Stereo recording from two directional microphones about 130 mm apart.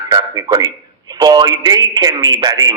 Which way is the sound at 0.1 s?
30° right (ahead or behind).